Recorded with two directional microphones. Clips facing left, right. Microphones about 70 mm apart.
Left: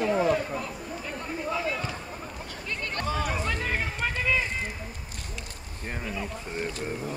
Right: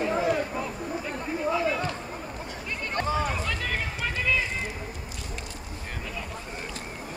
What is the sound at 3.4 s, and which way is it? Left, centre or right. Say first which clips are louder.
Run: left 1 dB; left.